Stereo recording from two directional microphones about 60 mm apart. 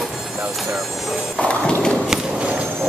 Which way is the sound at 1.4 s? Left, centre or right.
Centre.